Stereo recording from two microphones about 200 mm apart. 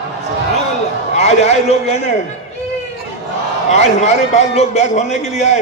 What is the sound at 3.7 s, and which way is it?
A man's voice, 35° left (ahead or behind).